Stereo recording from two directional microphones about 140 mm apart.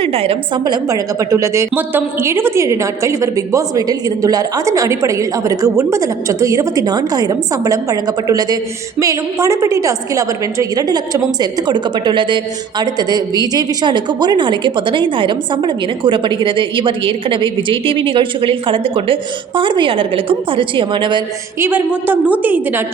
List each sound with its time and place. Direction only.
0.0 s a woman's voice: 40° right (ahead or behind)
0.6 s a woman's voice: 30° right (ahead or behind)
21.6 s a woman's voice: 15° right (ahead or behind)